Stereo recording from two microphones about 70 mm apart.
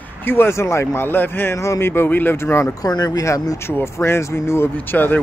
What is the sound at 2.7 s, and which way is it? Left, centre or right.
Speech, left.